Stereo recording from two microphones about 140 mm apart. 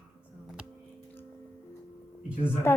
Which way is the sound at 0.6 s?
5° right (ahead or behind).